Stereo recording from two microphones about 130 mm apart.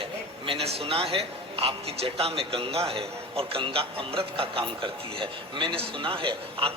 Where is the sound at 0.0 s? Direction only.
45° right (ahead or behind).